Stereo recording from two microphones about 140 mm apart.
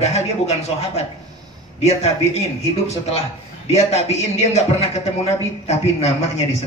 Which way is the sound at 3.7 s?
50° left (ahead or behind).